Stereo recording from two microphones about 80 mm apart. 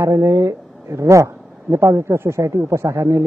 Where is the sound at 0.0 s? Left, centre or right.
Right.